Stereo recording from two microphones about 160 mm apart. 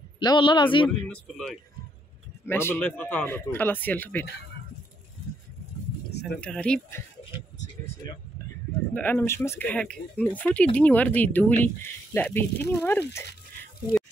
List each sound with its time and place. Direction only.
0.2 s a man's voice: 30° left (ahead or behind)
1.0 s speech: 5° left (ahead or behind)
6.4 s speech: 5° left (ahead or behind)
8.9 s speech: 10° left (ahead or behind)